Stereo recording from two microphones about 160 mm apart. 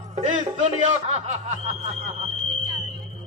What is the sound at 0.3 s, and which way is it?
A man's voice, 45° right (ahead or behind).